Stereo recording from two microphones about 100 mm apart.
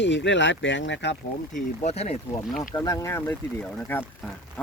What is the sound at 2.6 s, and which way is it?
Speech, 35° left (ahead or behind).